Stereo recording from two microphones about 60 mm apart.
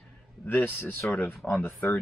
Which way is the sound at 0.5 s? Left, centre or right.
Left.